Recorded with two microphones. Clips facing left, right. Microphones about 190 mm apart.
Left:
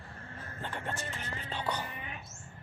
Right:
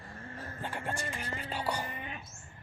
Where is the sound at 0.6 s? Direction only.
10° right (ahead or behind).